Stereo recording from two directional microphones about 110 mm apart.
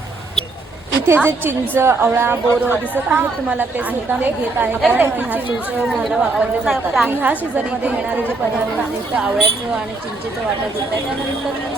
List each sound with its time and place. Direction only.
1.0 s a woman's voice: 20° right (ahead or behind)
5.9 s a woman's voice: 5° right (ahead or behind)
7.2 s a woman's voice: 15° right (ahead or behind)